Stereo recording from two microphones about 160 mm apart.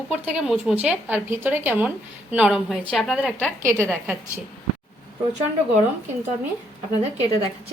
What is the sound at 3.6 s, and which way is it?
Speech, 20° right (ahead or behind).